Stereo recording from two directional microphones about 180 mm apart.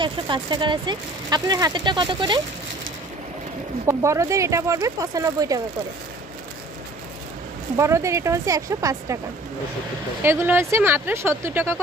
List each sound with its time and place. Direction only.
0.0 s speech: 25° right (ahead or behind)
3.8 s speech: 15° right (ahead or behind)
7.7 s speech: 15° right (ahead or behind)
10.2 s speech: 10° right (ahead or behind)